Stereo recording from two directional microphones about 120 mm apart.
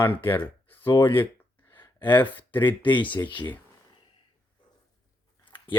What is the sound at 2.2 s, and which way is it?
Speech, 15° left (ahead or behind).